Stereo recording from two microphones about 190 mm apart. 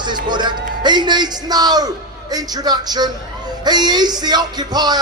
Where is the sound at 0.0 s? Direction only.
25° right (ahead or behind).